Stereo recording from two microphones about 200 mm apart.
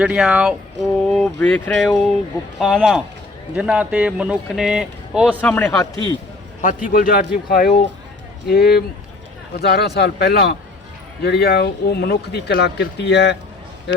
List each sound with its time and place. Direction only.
0.0 s speech: 5° right (ahead or behind)
5.4 s a man's voice: 10° left (ahead or behind)
6.6 s a man's voice: 40° left (ahead or behind); by 13.3 s 60° left (ahead or behind)